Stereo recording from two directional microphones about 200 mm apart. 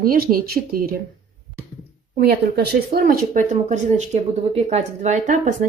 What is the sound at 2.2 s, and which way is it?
Speech, 55° right (ahead or behind).